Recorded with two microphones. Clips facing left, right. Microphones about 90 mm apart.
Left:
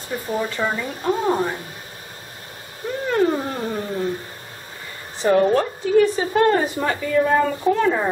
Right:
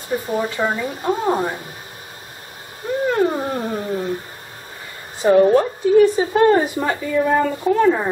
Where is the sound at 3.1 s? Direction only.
15° right (ahead or behind).